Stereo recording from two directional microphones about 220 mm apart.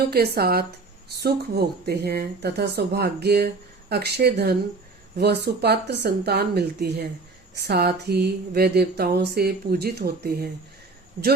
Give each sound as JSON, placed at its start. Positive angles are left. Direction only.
{"t": 0.1, "sound": "speech", "side_deg": -45}